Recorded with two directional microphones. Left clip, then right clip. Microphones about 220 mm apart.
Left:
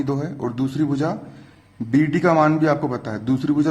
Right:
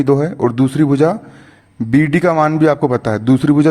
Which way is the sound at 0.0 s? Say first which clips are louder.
Right 11 dB; 35° right (ahead or behind).